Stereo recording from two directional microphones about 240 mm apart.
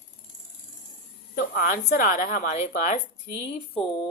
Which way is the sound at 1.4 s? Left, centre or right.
Left.